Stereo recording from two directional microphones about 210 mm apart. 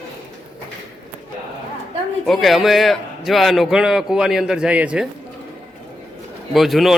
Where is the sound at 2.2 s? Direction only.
Centre (ahead or behind).